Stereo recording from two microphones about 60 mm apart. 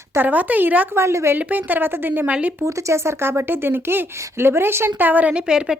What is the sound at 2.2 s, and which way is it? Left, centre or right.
Speech, right.